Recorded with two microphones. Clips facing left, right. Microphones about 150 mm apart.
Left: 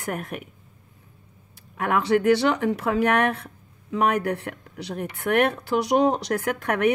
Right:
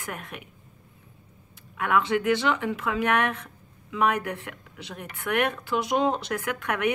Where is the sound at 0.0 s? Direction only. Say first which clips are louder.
Left 7 dB; 40° left (ahead or behind).